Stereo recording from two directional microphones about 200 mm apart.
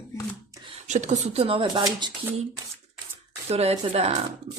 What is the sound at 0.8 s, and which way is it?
Speech, 35° right (ahead or behind).